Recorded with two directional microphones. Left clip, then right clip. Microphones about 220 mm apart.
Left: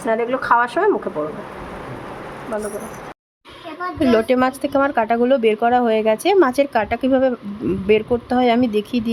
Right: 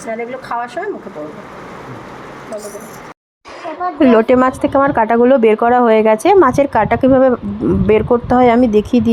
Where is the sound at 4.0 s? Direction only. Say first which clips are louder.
Right 6 dB; 15° right (ahead or behind).